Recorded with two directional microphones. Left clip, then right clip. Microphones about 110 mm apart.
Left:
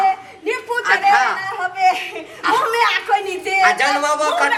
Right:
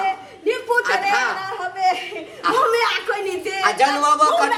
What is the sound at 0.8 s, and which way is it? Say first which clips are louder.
Speech: left 9 dB; 5° right (ahead or behind).